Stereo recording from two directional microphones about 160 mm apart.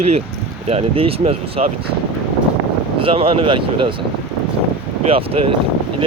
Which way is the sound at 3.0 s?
35° right (ahead or behind).